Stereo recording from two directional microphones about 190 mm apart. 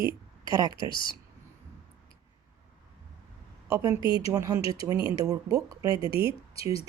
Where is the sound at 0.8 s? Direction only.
25° left (ahead or behind).